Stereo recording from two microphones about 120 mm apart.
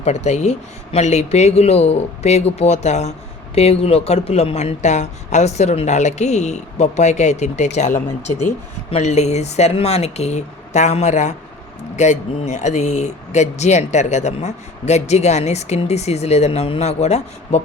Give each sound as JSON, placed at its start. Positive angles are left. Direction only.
{"t": 0.0, "sound": "speech", "side_deg": 70}
{"t": 8.9, "sound": "speech", "side_deg": 70}